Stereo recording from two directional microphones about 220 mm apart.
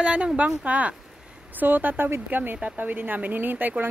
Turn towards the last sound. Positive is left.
turn(degrees=-10)  # may be behind; listen again after turning